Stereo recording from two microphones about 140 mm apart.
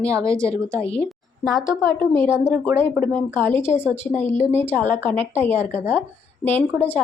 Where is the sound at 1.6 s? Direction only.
20° left (ahead or behind).